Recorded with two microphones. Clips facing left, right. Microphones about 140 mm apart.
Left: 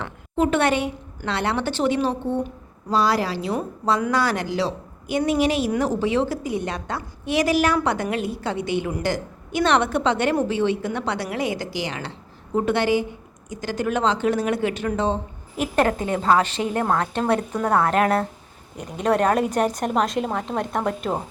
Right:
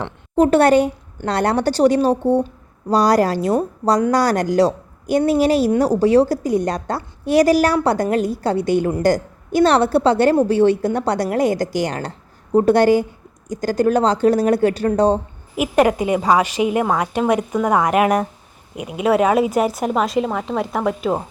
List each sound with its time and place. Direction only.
0.0 s speech: 40° right (ahead or behind)
15.5 s a woman's voice: 10° right (ahead or behind)